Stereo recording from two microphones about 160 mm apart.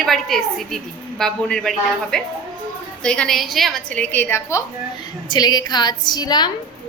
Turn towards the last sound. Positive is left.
turn(degrees=25)  # may be behind; listen again after turning